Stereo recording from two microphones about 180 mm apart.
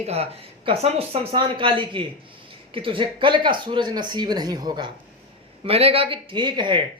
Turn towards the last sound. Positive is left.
turn(degrees=-25)  # may be behind; listen again after turning